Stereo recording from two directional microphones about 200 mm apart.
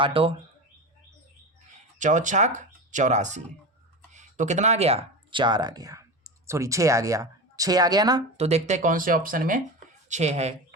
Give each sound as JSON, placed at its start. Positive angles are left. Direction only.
{"t": 0.0, "sound": "speech", "side_deg": -25}
{"t": 2.0, "sound": "speech", "side_deg": -40}
{"t": 8.4, "sound": "speech", "side_deg": -35}
{"t": 10.1, "sound": "speech", "side_deg": -35}